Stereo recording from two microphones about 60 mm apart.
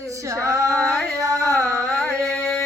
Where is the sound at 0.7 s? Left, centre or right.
Centre.